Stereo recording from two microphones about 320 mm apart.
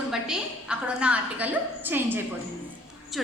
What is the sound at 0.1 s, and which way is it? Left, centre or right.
A woman's voice, centre.